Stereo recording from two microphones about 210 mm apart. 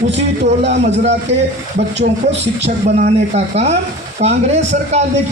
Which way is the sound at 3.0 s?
30° right (ahead or behind).